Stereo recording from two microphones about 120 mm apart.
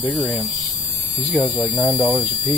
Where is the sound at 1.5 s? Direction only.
30° left (ahead or behind).